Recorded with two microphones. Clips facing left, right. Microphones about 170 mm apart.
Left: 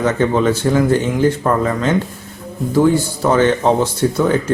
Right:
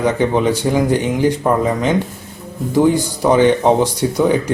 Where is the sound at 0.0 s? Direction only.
15° right (ahead or behind).